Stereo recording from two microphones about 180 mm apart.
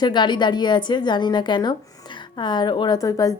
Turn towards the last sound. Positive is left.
turn(degrees=20)  # may be behind; listen again after turning